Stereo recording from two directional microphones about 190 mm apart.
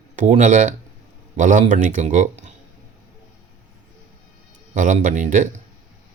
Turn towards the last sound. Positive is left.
turn(degrees=-40)  # may be behind; listen again after turning